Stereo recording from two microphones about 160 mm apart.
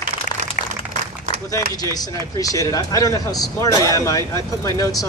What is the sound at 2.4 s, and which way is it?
A man's voice, 20° left (ahead or behind).